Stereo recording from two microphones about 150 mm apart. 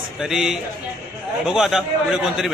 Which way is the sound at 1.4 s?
5° right (ahead or behind).